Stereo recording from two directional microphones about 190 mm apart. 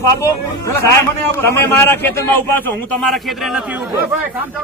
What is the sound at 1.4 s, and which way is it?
A man's voice, 10° left (ahead or behind).